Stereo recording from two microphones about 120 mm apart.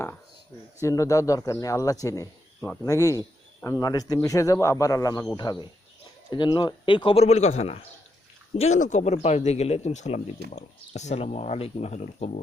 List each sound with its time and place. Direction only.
0.8 s a man's voice: 25° left (ahead or behind); by 12.4 s 80° left